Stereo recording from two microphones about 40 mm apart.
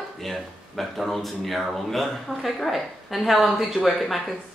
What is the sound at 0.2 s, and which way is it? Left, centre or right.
A woman's voice, centre.